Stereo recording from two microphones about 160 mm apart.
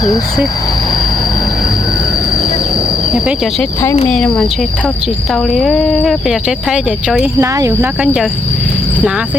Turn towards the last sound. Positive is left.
turn(degrees=-20)  # may be behind; listen again after turning